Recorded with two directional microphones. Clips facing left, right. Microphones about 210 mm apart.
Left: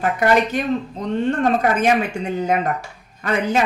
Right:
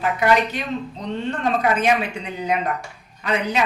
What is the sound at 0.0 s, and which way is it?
Speech, 50° left (ahead or behind).